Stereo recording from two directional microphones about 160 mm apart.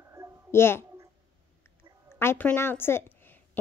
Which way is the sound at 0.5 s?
15° left (ahead or behind).